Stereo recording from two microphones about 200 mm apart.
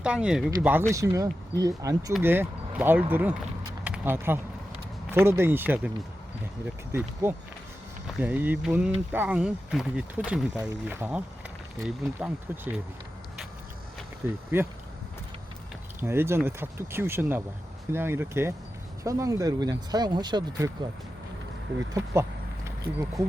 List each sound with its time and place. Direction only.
0.0 s speech: 5° right (ahead or behind)
6.9 s speech: 10° right (ahead or behind)
12.2 s speech: 5° right (ahead or behind)
14.2 s speech: 10° right (ahead or behind)
16.0 s speech: 10° right (ahead or behind)
21.9 s speech: 15° right (ahead or behind)